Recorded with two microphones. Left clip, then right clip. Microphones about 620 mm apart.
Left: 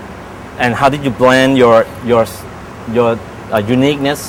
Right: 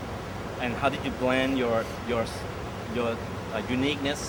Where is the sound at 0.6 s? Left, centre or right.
Left.